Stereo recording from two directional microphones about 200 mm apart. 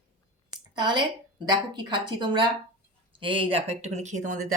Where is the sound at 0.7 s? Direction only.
20° right (ahead or behind); by 4.4 s 40° right (ahead or behind).